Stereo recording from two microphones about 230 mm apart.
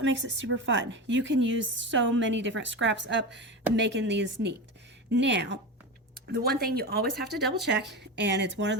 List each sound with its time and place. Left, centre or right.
0.0 s a woman's voice: right